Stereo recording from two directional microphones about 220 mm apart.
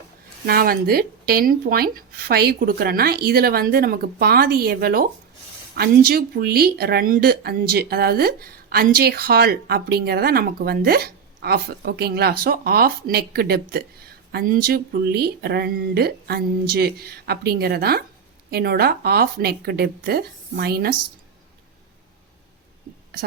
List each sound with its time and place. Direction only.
0.4 s speech: 40° right (ahead or behind)